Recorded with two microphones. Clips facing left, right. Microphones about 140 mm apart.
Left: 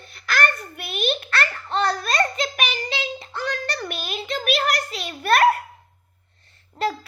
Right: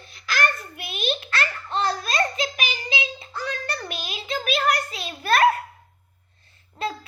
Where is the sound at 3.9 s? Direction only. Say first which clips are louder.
Left 2 dB; 55° left (ahead or behind).